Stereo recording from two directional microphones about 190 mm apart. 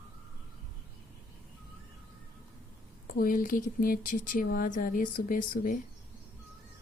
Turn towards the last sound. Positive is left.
turn(degrees=45)  # may be behind; listen again after turning